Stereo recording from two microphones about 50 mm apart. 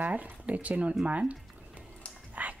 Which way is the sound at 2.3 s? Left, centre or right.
Right.